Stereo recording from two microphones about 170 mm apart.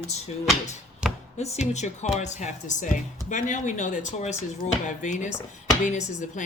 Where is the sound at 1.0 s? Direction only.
5° right (ahead or behind).